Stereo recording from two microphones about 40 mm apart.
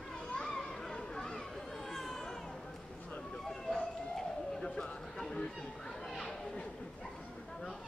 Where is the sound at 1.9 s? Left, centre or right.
Centre.